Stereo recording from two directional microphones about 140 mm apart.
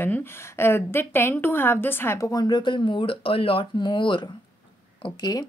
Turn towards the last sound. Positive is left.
turn(degrees=30)  # may be behind; listen again after turning